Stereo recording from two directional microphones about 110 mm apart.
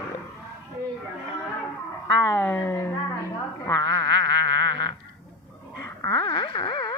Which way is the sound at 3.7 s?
35° left (ahead or behind).